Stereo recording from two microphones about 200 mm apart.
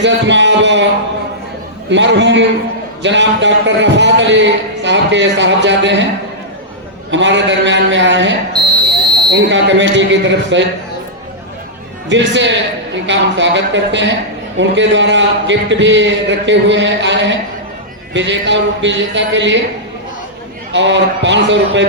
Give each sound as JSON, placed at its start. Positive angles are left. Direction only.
{"t": 0.0, "sound": "speech", "side_deg": -65}
{"t": 1.9, "sound": "speech", "side_deg": -65}
{"t": 7.1, "sound": "speech", "side_deg": -65}
{"t": 12.0, "sound": "speech", "side_deg": -65}
{"t": 20.7, "sound": "speech", "side_deg": -65}